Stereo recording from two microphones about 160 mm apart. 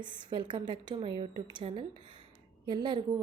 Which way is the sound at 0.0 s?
30° right (ahead or behind).